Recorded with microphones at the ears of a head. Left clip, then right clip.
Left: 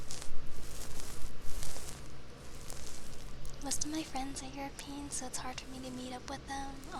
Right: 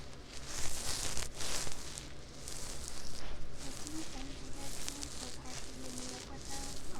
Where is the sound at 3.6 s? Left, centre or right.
Left.